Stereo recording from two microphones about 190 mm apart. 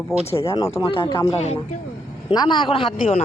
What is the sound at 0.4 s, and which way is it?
Speech, 20° left (ahead or behind).